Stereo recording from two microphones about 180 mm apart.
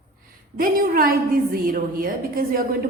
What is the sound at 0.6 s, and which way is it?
A woman's voice, 50° right (ahead or behind).